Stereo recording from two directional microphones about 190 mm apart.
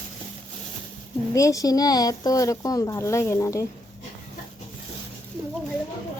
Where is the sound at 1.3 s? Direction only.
15° left (ahead or behind).